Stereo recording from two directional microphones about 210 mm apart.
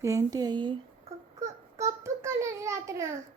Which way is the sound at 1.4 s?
15° right (ahead or behind).